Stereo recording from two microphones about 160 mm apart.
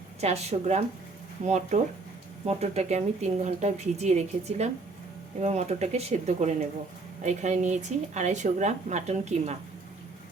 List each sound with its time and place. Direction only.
0.2 s speech: 40° right (ahead or behind)